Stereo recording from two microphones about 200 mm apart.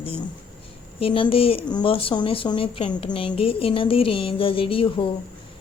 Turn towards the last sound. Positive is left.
turn(degrees=25)  # may be behind; listen again after turning